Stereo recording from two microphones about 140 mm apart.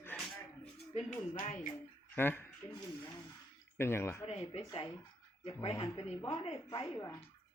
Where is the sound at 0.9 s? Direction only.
60° left (ahead or behind).